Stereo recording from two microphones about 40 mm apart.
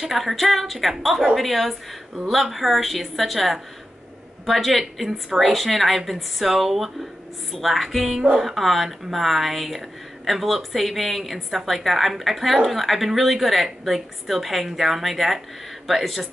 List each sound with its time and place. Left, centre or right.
0.1 s a woman's voice: centre
8.2 s speech: centre
8.5 s a woman's voice: centre